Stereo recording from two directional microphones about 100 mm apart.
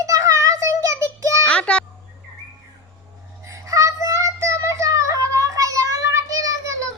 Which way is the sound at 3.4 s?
30° right (ahead or behind).